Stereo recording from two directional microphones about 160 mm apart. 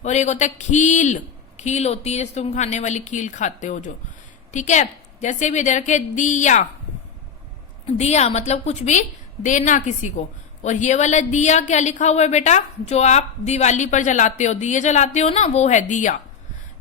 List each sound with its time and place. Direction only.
0.0 s speech: 45° left (ahead or behind)
7.9 s speech: 45° left (ahead or behind)